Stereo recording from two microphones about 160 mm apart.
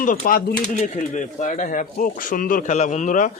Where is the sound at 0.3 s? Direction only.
70° left (ahead or behind).